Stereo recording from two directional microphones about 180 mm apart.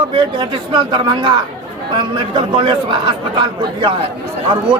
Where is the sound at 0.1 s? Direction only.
25° right (ahead or behind).